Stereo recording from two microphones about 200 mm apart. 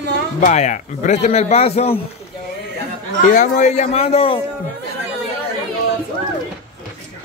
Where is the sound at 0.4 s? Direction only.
35° left (ahead or behind).